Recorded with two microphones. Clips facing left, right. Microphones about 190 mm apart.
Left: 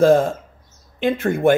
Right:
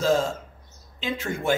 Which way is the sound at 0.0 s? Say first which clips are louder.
Left 8 dB; 55° left (ahead or behind).